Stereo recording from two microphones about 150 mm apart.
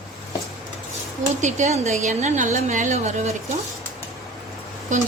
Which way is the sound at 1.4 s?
55° right (ahead or behind).